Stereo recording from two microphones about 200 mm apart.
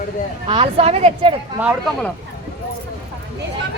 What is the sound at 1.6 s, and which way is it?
Speech, 10° right (ahead or behind).